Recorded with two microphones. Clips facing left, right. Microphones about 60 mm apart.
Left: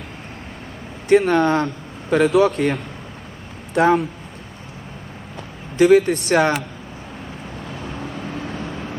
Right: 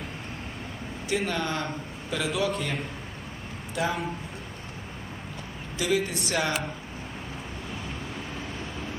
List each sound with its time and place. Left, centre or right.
1.0 s speech: left
2.0 s a man's voice: left
2.3 s speech: left
5.7 s speech: left